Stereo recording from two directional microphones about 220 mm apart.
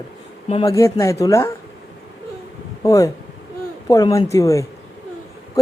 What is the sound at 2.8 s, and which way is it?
Speech, 15° left (ahead or behind).